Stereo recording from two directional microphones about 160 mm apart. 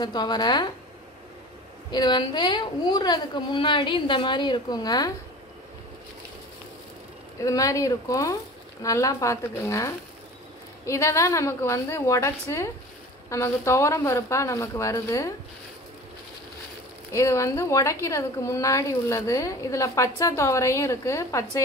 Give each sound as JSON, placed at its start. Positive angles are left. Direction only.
{"t": 0.0, "sound": "a woman's voice", "side_deg": 25}
{"t": 1.9, "sound": "a woman's voice", "side_deg": 25}
{"t": 7.4, "sound": "a woman's voice", "side_deg": 20}
{"t": 17.1, "sound": "a woman's voice", "side_deg": 20}